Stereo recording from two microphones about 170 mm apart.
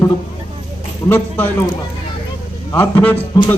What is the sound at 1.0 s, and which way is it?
Speech, 15° left (ahead or behind).